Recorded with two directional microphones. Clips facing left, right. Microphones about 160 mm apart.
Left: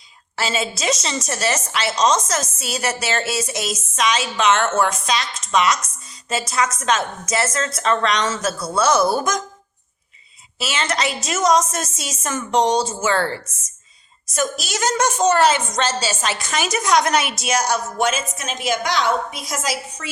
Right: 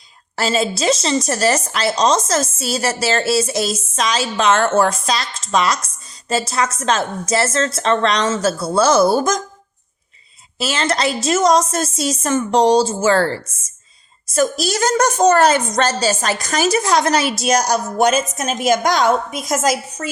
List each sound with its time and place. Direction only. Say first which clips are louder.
0.3 s a woman's voice: right 5 dB; 35° right (ahead or behind)
10.6 s a woman's voice: right 4 dB; 35° right (ahead or behind)